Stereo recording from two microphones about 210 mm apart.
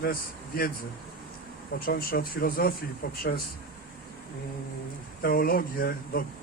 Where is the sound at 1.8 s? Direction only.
45° left (ahead or behind).